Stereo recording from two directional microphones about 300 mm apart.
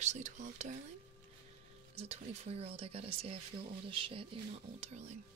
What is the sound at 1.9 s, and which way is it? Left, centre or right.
Speech, centre.